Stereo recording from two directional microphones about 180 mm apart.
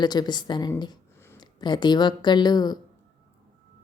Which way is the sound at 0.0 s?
25° left (ahead or behind).